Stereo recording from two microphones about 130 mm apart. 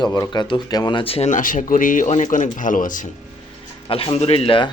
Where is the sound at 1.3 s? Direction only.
85° left.